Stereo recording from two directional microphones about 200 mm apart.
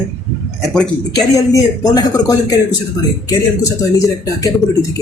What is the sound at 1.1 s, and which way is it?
Speech, 20° left (ahead or behind).